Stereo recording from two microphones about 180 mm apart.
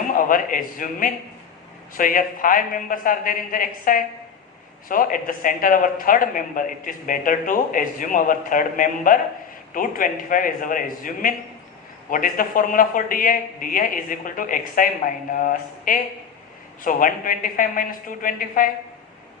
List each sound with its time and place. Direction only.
0.1 s a man's voice: 50° left (ahead or behind)